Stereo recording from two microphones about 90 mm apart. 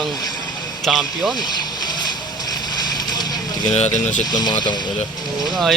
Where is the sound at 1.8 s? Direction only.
50° left (ahead or behind).